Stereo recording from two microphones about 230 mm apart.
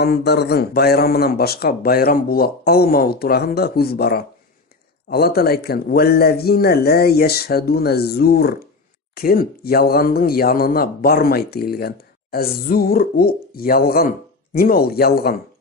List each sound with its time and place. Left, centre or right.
0.0 s speech: left